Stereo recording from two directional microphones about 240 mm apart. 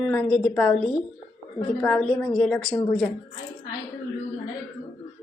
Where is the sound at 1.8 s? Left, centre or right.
Centre.